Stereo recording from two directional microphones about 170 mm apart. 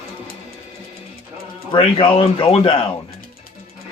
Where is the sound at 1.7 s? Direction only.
30° left (ahead or behind).